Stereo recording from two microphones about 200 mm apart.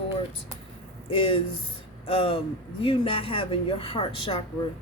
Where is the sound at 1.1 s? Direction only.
25° left (ahead or behind).